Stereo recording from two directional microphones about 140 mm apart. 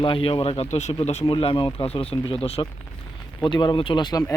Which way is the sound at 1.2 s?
40° left (ahead or behind).